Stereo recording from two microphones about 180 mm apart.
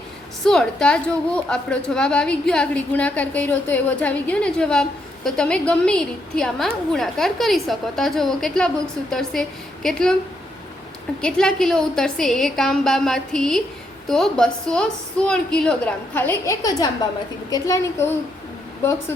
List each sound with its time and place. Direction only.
0.4 s a woman's voice: 5° left (ahead or behind)
11.2 s a woman's voice: 5° left (ahead or behind)